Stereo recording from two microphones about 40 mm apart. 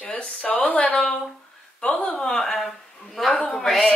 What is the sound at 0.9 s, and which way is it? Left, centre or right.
Speech, centre.